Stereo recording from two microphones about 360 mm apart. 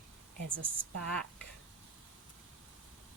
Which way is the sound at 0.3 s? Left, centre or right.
Right.